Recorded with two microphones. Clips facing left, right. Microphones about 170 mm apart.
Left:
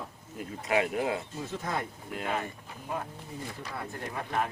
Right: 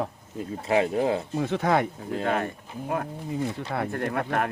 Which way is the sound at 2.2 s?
60° right (ahead or behind).